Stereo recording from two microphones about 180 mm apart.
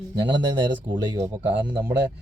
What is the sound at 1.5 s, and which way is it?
Speech, 80° right.